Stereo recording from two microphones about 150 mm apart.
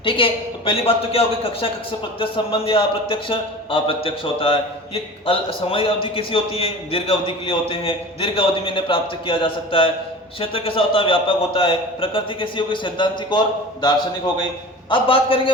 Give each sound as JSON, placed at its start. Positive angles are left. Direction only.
{"t": 0.0, "sound": "a man's voice", "side_deg": 35}
{"t": 14.8, "sound": "a man's voice", "side_deg": 35}